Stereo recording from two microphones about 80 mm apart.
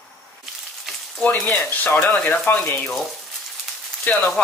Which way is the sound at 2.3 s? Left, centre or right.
Left.